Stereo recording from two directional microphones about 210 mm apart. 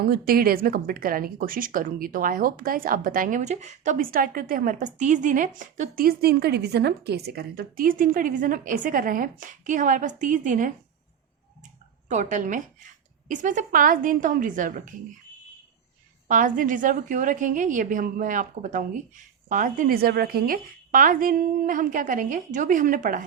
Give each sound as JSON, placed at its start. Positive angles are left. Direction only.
{"t": 0.0, "sound": "speech", "side_deg": -45}
{"t": 12.0, "sound": "speech", "side_deg": -35}
{"t": 16.3, "sound": "speech", "side_deg": -40}